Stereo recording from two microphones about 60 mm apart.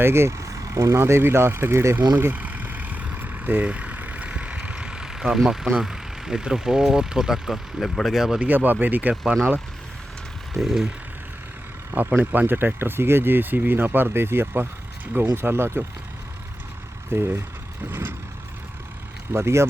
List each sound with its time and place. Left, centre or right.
0.0 s speech: right
2.3 s vehicle: right; by 5.6 s centre
5.8 s speech: centre
8.4 s speech: right
10.5 s speech: centre
12.1 s speech: right
17.1 s speech: right
19.3 s speech: right